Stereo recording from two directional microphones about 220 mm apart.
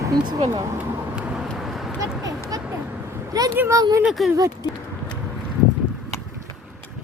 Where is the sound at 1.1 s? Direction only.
5° right (ahead or behind).